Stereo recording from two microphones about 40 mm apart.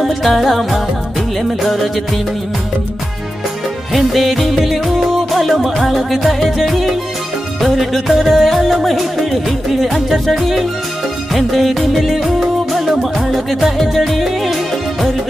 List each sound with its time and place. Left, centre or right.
0.0 s music: centre
3.9 s music: centre